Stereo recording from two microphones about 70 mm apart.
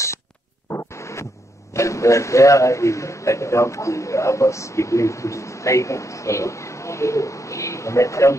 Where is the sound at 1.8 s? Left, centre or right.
Left.